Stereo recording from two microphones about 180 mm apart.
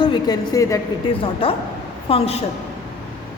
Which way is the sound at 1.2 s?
30° left (ahead or behind).